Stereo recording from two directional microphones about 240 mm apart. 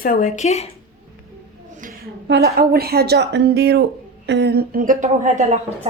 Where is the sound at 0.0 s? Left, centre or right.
Left.